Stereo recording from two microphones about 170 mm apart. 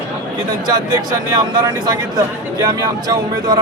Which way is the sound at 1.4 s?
25° right (ahead or behind).